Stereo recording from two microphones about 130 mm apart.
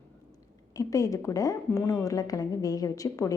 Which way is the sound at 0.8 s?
25° left (ahead or behind).